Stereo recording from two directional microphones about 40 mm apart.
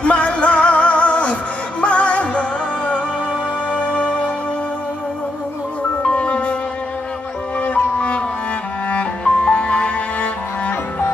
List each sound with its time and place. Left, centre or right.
0.0 s music: left
3.7 s music: left
6.0 s music: left
8.9 s music: left